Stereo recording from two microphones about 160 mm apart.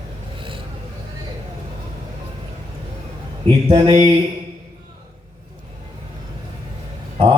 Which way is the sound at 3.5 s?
30° right (ahead or behind).